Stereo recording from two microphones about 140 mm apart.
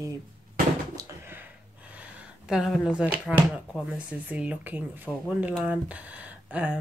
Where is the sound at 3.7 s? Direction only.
10° right (ahead or behind).